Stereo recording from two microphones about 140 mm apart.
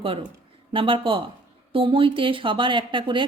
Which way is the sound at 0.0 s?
40° right (ahead or behind).